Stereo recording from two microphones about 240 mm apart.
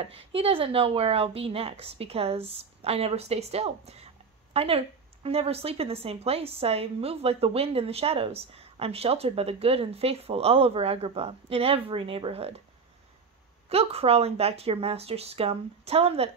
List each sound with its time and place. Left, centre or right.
0.0 s speech: right
13.7 s speech: right